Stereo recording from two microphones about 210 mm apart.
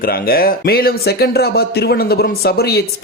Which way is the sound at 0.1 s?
45° left (ahead or behind).